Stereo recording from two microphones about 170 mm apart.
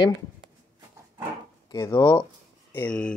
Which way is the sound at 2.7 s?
10° left (ahead or behind).